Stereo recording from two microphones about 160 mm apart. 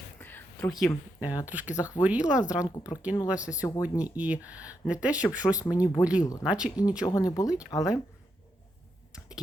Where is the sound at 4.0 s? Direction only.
10° right (ahead or behind).